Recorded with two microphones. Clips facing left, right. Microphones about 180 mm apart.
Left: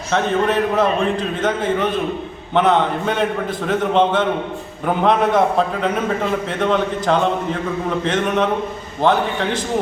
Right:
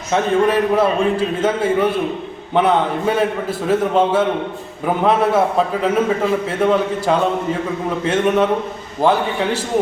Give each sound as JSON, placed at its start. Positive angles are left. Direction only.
{"t": 0.1, "sound": "a man's voice", "side_deg": -10}